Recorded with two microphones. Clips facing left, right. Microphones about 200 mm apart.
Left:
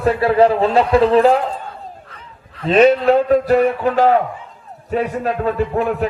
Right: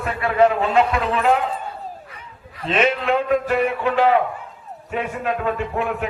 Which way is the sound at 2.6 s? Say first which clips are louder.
Left 8 dB; 35° left (ahead or behind).